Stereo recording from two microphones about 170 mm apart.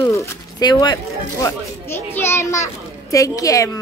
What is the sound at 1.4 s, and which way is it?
A child's voice, 15° left (ahead or behind).